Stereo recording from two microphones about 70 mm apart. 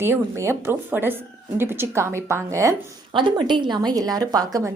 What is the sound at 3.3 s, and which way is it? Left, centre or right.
A woman's voice, right.